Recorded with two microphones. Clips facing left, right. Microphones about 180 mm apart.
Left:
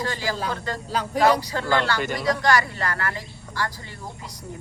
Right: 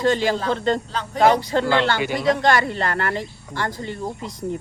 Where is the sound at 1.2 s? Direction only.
25° right (ahead or behind).